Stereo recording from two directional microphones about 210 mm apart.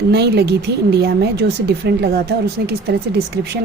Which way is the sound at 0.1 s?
50° right (ahead or behind).